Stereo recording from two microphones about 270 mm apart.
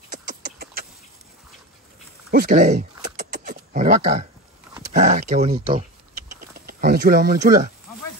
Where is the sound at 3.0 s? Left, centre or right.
Right.